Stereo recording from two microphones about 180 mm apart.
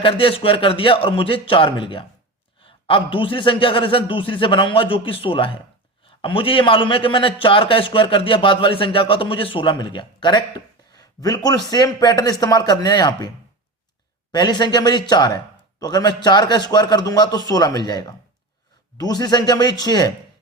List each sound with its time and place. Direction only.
0.0 s a man's voice: 30° left (ahead or behind)
14.3 s a man's voice: 25° left (ahead or behind)